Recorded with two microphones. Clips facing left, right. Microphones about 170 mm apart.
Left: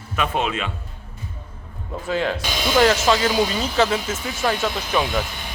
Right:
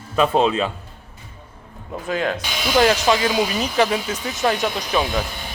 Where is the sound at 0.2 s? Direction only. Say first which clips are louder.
Right 6 dB; 30° right (ahead or behind).